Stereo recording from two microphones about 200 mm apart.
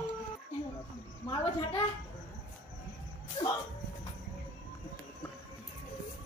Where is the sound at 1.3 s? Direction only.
25° left (ahead or behind).